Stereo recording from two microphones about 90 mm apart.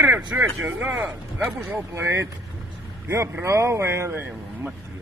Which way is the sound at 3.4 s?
35° right (ahead or behind).